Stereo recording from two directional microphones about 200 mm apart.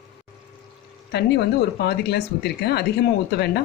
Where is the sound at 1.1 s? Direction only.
55° left (ahead or behind).